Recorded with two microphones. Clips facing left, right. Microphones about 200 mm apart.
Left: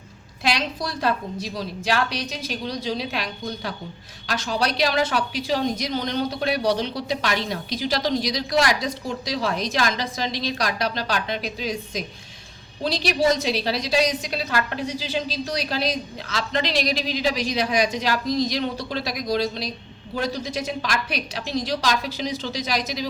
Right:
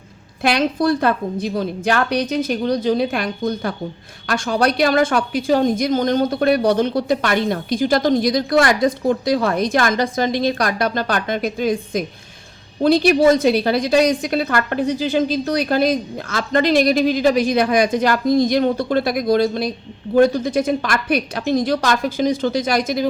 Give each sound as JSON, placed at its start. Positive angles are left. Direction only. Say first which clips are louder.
{"t": 0.4, "sound": "a woman's voice", "louder": "right 9 dB", "side_deg": -55}